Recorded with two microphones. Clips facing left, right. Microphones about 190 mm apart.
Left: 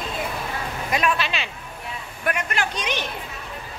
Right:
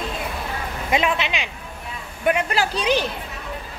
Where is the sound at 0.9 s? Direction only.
20° right (ahead or behind).